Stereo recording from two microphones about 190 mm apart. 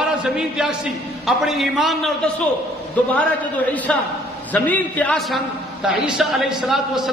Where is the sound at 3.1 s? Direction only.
10° left (ahead or behind).